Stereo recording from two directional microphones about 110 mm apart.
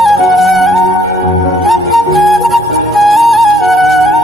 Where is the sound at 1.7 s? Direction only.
Centre (ahead or behind).